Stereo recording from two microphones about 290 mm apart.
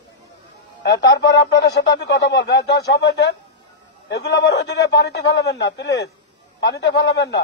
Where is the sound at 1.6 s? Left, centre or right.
Left.